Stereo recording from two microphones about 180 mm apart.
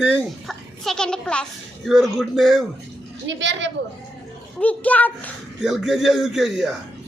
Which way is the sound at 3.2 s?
85° right.